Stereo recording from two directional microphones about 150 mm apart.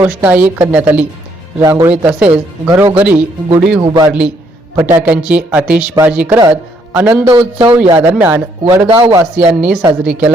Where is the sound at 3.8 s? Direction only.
25° right (ahead or behind).